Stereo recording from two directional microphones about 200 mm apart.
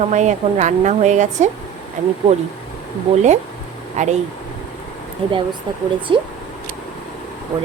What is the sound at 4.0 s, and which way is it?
Speech, 35° right (ahead or behind).